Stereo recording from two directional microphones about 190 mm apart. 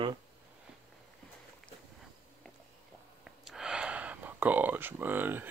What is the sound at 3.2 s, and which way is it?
Gasp, centre (ahead or behind).